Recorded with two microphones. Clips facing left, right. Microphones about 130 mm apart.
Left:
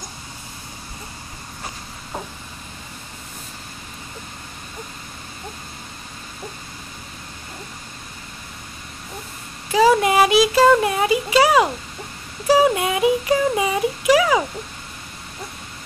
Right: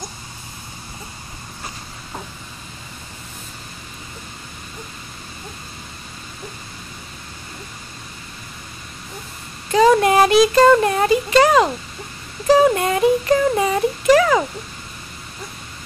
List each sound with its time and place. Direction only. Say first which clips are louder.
9.7 s speech: right 2 dB; 5° left (ahead or behind)